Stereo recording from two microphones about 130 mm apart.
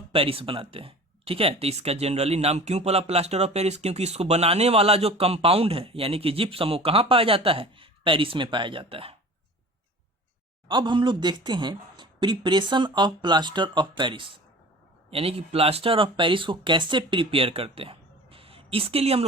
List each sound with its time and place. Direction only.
0.1 s speech: 45° right (ahead or behind)
10.7 s a woman's voice: 35° right (ahead or behind)
15.1 s speech: 50° right (ahead or behind)